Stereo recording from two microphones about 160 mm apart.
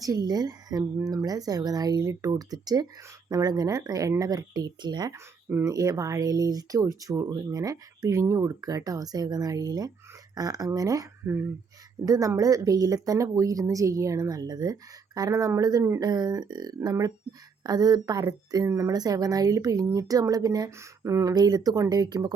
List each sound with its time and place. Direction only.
0.0 s speech: 25° right (ahead or behind)